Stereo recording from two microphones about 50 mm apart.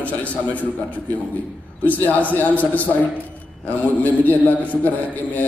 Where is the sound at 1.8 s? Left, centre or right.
Left.